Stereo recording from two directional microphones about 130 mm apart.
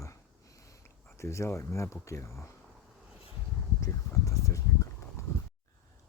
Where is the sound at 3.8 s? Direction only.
25° left (ahead or behind).